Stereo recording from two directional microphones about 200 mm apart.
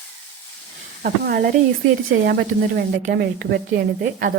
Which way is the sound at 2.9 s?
55° right (ahead or behind).